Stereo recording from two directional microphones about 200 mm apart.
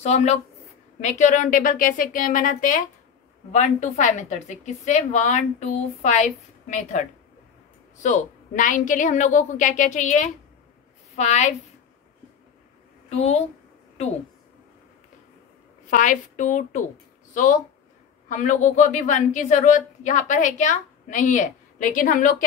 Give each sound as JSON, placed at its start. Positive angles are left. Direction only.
{"t": 0.0, "sound": "a woman's voice", "side_deg": 35}
{"t": 13.1, "sound": "a woman's voice", "side_deg": 35}
{"t": 15.9, "sound": "a woman's voice", "side_deg": 40}